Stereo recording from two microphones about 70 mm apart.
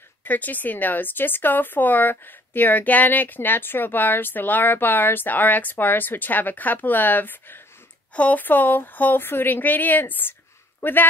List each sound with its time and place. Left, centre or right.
0.2 s speech: left